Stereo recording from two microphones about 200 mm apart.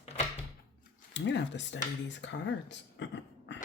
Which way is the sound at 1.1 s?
65° left (ahead or behind).